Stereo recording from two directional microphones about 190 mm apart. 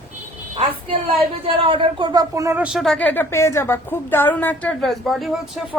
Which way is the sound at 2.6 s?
Centre (ahead or behind).